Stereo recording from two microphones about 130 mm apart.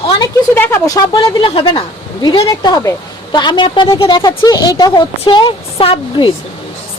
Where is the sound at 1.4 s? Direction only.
40° left (ahead or behind).